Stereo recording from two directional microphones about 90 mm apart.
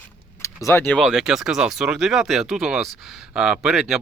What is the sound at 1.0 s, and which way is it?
Speech, 5° right (ahead or behind).